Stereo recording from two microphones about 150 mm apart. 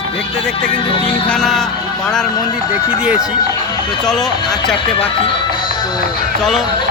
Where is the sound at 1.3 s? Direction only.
Centre (ahead or behind).